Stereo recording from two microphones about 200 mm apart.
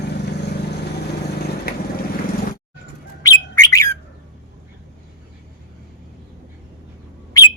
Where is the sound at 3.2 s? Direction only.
15° left (ahead or behind).